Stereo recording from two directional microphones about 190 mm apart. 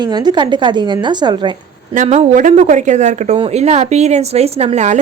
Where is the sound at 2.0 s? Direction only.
40° right (ahead or behind).